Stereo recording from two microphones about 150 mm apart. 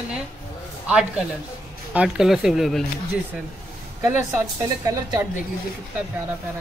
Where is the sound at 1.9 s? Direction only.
5° right (ahead or behind).